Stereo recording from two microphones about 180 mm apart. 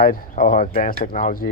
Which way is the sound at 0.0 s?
50° left (ahead or behind).